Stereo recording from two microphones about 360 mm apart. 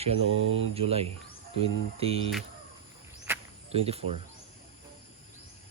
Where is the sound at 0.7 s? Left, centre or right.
Centre.